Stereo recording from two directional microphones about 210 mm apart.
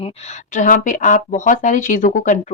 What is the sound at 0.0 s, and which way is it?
A woman's voice, 35° left (ahead or behind).